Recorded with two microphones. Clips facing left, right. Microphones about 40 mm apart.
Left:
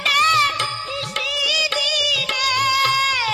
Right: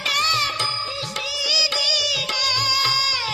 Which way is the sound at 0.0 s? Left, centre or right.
Left.